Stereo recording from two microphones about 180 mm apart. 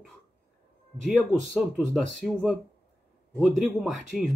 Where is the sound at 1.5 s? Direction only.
Centre (ahead or behind).